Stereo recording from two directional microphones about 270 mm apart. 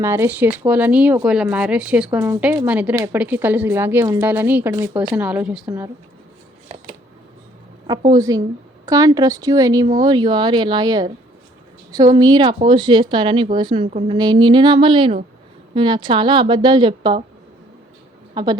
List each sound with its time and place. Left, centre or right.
0.0 s speech: centre
7.9 s speech: centre
18.4 s speech: centre